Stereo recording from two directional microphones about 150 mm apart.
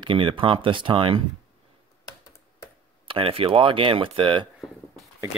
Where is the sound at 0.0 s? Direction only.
35° right (ahead or behind).